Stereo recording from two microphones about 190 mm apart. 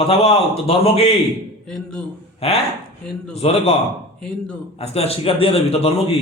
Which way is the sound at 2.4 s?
30° left (ahead or behind).